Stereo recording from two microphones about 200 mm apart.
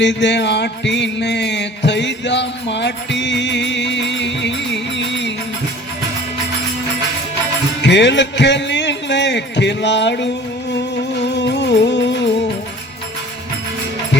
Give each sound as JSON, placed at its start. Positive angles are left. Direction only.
{"t": 0.0, "sound": "music", "side_deg": 65}
{"t": 7.8, "sound": "music", "side_deg": 60}
{"t": 11.3, "sound": "music", "side_deg": 60}